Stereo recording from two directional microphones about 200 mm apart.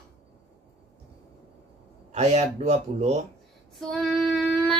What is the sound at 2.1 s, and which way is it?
Speech, 35° right (ahead or behind).